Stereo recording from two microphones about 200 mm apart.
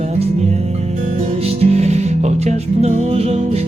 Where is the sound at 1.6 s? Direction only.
30° right (ahead or behind).